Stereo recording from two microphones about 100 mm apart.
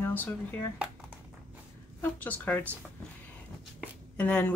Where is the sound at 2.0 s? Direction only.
15° left (ahead or behind).